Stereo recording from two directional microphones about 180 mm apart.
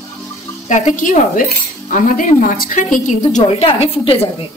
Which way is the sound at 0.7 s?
45° left (ahead or behind).